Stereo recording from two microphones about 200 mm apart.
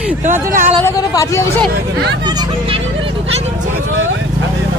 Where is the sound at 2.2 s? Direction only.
20° right (ahead or behind).